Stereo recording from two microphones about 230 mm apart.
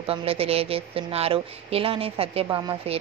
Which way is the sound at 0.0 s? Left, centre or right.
Right.